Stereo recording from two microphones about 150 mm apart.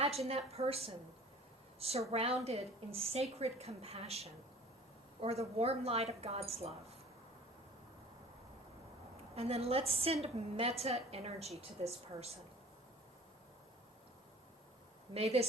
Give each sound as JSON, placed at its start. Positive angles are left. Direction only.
{"t": 0.3, "sound": "a woman's voice", "side_deg": -40}
{"t": 9.3, "sound": "a woman's voice", "side_deg": -45}
{"t": 15.1, "sound": "a woman's voice", "side_deg": -40}